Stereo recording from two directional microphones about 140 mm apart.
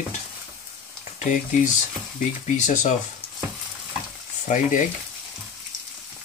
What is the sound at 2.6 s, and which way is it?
Speech, 60° left (ahead or behind).